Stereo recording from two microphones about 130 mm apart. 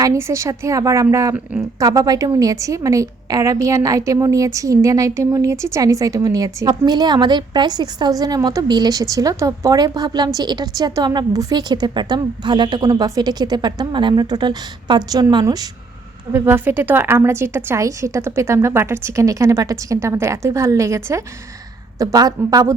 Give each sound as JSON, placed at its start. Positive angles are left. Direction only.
{"t": 0.0, "sound": "a woman's voice", "side_deg": -20}
{"t": 16.3, "sound": "a woman's voice", "side_deg": -20}